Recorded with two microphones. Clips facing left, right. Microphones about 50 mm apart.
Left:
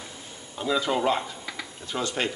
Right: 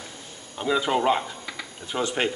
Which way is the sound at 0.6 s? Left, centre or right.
Centre.